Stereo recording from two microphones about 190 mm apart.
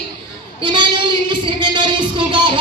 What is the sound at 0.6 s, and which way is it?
Speech, 25° right (ahead or behind).